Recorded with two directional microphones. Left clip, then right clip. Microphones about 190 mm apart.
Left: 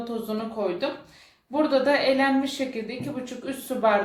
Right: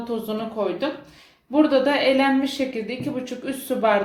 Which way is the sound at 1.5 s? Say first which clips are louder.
Right 3 dB; 30° right (ahead or behind).